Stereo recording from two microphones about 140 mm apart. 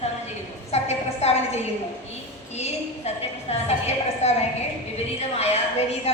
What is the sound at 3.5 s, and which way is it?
A woman's voice, 50° left (ahead or behind).